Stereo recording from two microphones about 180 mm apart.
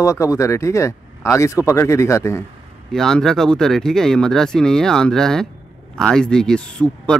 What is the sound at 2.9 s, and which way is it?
Speech, 5° left (ahead or behind).